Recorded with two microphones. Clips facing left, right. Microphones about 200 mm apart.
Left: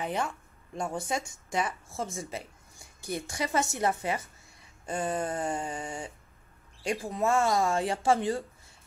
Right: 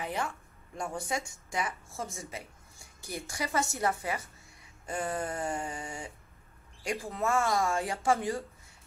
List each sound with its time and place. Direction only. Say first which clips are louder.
0.0 s a woman's voice: left 3 dB; 25° left (ahead or behind)